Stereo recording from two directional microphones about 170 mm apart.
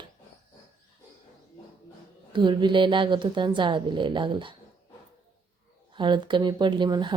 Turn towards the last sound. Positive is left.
turn(degrees=-25)  # may be behind; listen again after turning